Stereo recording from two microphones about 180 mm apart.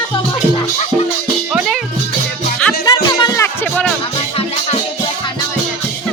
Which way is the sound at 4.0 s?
35° left (ahead or behind).